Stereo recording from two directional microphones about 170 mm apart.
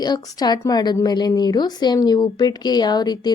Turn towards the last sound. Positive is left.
turn(degrees=25)  # may be behind; listen again after turning